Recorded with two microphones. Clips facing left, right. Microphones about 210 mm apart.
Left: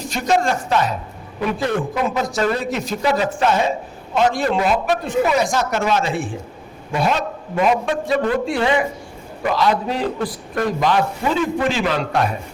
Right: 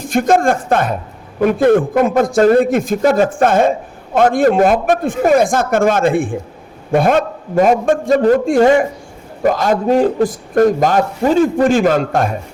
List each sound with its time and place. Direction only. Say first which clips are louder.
0.0 s a man's voice: right 6 dB; 50° right (ahead or behind)